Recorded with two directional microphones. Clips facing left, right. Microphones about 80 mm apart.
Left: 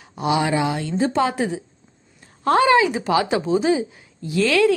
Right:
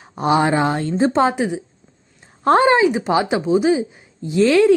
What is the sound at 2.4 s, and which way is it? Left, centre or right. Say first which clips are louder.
Speech: right 2 dB; right.